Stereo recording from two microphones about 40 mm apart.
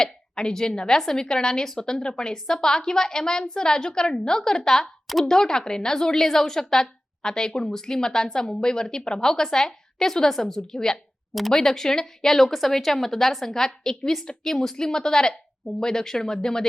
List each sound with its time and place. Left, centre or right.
0.0 s a woman's voice: centre
5.0 s speech: centre
5.3 s a woman's voice: centre